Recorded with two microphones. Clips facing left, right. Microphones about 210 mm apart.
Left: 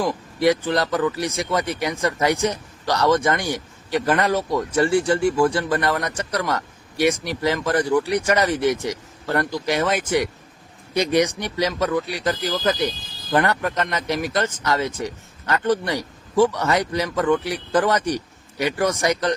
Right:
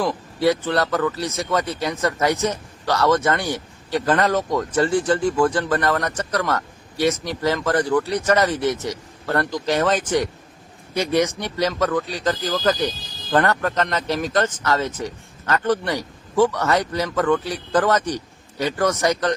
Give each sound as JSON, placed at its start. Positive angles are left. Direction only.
{"t": 0.0, "sound": "speech", "side_deg": 15}